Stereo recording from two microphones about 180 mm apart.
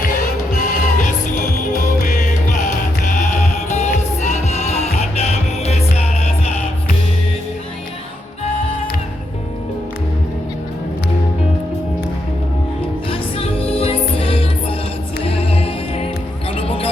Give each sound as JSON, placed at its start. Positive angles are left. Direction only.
{"t": 0.1, "sound": "music", "side_deg": 45}
{"t": 3.7, "sound": "music", "side_deg": 40}
{"t": 13.1, "sound": "music", "side_deg": 30}